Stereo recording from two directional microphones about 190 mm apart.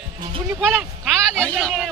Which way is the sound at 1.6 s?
Centre (ahead or behind).